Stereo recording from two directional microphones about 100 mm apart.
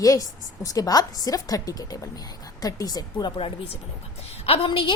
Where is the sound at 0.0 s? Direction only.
35° left (ahead or behind).